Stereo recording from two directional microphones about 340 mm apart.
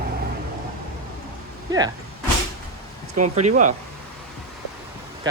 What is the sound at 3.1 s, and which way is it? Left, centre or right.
Speech, right.